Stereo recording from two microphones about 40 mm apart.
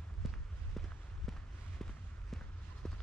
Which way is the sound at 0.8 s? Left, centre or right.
Centre.